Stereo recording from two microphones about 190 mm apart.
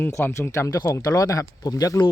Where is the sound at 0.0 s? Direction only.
15° left (ahead or behind).